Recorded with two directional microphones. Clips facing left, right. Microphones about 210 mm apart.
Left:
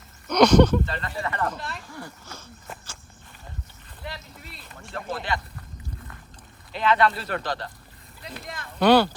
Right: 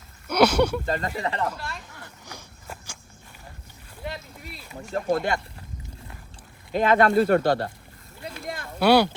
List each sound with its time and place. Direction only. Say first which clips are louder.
0.3 s a sound: left 3 dB; 10° right (ahead or behind)
0.9 s speech: right 4 dB; 45° right (ahead or behind)
1.5 s speech: even; centre (ahead or behind)
2.3 s speech: even; 15° right (ahead or behind)
4.5 s speech: right 5 dB; 10° right (ahead or behind)
4.8 s speech: right 8 dB; 40° right (ahead or behind)
6.7 s speech: right 4 dB; 45° right (ahead or behind)
8.8 s speech: left 1 dB; 10° right (ahead or behind)